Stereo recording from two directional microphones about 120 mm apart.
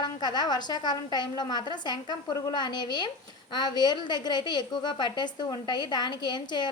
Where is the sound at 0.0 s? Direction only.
35° left (ahead or behind).